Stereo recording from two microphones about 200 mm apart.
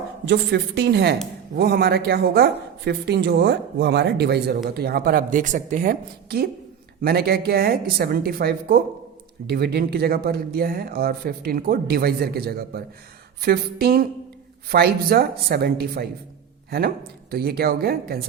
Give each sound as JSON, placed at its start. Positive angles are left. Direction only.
{"t": 0.3, "sound": "speech", "side_deg": -60}